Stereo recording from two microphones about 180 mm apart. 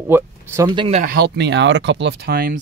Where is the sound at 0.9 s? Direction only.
50° right (ahead or behind).